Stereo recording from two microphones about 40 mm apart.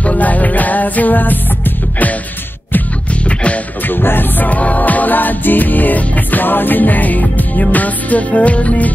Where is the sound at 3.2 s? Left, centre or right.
Left.